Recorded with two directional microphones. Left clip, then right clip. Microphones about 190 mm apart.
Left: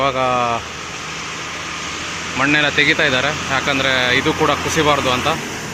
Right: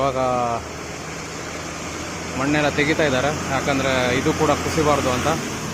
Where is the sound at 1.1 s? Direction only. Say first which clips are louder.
Left 5 dB; 60° right (ahead or behind).